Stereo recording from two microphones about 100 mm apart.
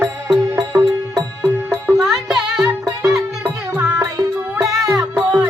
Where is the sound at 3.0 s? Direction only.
35° right (ahead or behind).